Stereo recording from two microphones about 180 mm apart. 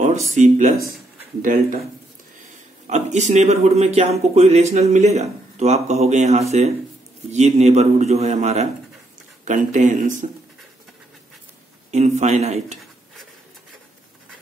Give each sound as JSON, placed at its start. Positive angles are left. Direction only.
{"t": 0.4, "sound": "speech", "side_deg": -40}
{"t": 2.9, "sound": "speech", "side_deg": -40}
{"t": 11.9, "sound": "speech", "side_deg": -40}